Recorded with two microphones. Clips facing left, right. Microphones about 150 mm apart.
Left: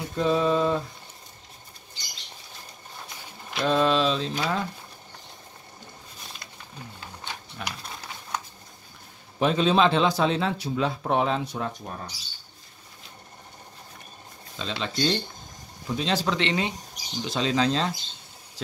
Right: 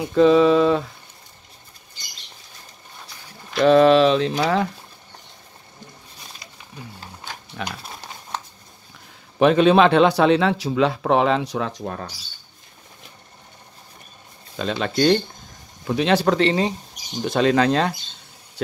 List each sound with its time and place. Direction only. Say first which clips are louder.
0.1 s a sound: right 9 dB; 90° right
3.5 s speech: right 9 dB; 65° right (ahead or behind)
7.6 s a sound: right 6 dB; 90° right
9.4 s speech: right 7 dB; 65° right (ahead or behind); by 12.1 s 90° right
14.6 s speech: right 7 dB; 55° right (ahead or behind)
16.3 s speech: right 7 dB; 35° right (ahead or behind)
17.2 s speech: right 7 dB; 55° right (ahead or behind)